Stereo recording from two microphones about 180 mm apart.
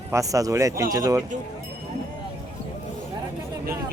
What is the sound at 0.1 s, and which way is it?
Speech, 20° right (ahead or behind).